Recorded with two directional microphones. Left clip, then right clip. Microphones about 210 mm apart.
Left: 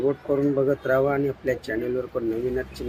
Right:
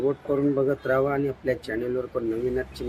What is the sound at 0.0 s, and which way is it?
Speech, 10° right (ahead or behind).